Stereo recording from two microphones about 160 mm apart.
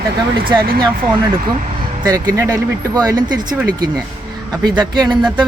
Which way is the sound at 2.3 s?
20° right (ahead or behind).